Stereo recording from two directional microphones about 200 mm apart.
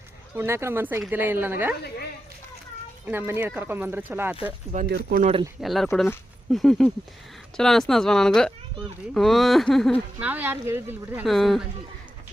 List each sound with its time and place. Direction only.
0.3 s speech: 15° right (ahead or behind)
3.1 s speech: 10° right (ahead or behind)
4.9 s speech: 55° right (ahead or behind)
5.1 s speech: 35° right (ahead or behind)
5.5 s speech: centre (ahead or behind)